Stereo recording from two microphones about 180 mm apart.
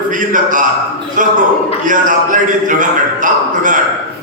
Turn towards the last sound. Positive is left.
turn(degrees=-45)  # may be behind; listen again after turning